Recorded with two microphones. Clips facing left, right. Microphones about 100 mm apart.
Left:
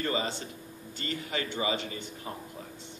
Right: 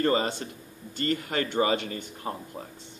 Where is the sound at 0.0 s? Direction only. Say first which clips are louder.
Right 6 dB; 45° right (ahead or behind).